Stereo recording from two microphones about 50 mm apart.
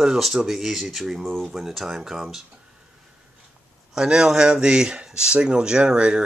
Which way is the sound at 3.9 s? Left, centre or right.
Centre.